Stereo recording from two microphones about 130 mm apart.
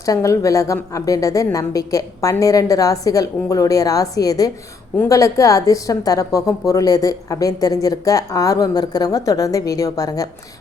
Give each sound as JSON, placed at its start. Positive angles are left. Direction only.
{"t": 0.0, "sound": "a woman's voice", "side_deg": 25}